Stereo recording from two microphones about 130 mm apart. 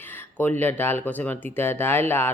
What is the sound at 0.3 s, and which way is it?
Speech, 15° left (ahead or behind).